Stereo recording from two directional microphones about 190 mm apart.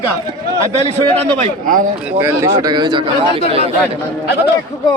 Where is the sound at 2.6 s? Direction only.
25° right (ahead or behind).